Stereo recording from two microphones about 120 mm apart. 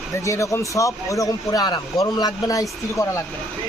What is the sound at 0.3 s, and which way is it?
Speech, 25° left (ahead or behind).